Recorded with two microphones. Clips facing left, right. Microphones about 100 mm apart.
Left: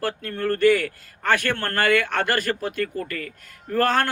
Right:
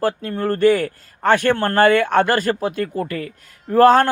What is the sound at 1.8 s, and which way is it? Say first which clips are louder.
Speech: right 7 dB; 35° right (ahead or behind).